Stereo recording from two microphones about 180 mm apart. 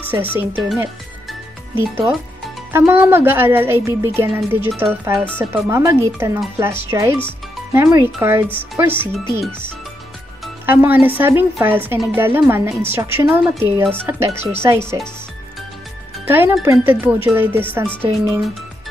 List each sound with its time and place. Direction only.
0.1 s speech: 10° right (ahead or behind)
1.8 s speech: 10° right (ahead or behind)
10.6 s speech: 10° right (ahead or behind)
16.3 s speech: 15° right (ahead or behind)